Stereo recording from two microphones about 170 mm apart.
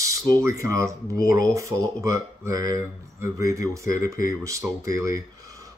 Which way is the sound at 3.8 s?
55° left (ahead or behind).